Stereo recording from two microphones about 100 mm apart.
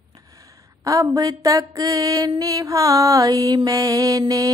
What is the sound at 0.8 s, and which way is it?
Mantra, 35° right (ahead or behind).